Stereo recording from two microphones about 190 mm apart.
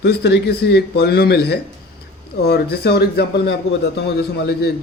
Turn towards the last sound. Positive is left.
turn(degrees=55)  # may be behind; listen again after turning